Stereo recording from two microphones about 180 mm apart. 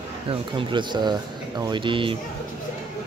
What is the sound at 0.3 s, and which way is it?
Speech, 30° right (ahead or behind).